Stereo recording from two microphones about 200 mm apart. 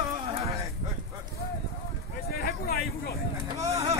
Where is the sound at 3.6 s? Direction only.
15° right (ahead or behind).